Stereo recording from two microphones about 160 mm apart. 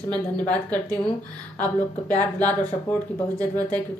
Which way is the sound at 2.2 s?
10° left (ahead or behind).